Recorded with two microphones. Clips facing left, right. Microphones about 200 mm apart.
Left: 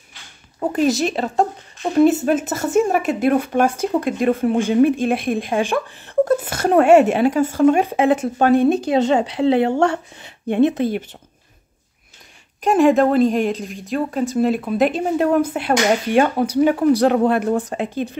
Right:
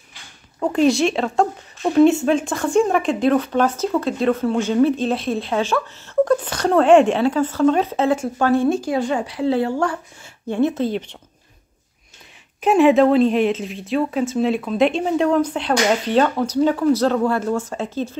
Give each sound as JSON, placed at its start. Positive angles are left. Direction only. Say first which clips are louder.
{"t": 0.7, "sound": "a woman's voice", "louder": "right 2 dB", "side_deg": 5}
{"t": 12.6, "sound": "a woman's voice", "louder": "right 1 dB", "side_deg": 0}